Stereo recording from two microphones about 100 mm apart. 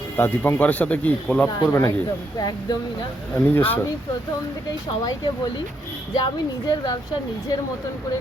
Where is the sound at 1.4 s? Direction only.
30° left (ahead or behind).